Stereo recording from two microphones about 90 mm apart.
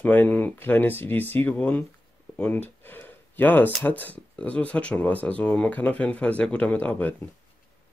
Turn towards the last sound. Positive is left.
turn(degrees=20)  # may be behind; listen again after turning